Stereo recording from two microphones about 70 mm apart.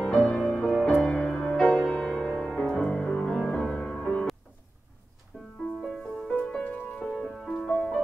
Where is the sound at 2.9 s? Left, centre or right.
Centre.